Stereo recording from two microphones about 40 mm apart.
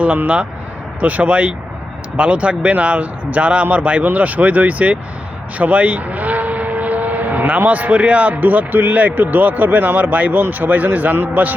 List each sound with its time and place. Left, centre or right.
1.0 s speech: right
5.5 s vehicle: right
7.6 s speech: right
8.4 s speech: right